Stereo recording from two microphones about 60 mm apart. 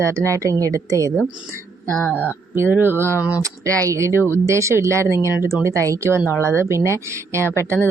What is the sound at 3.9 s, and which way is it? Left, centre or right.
A woman's voice, right.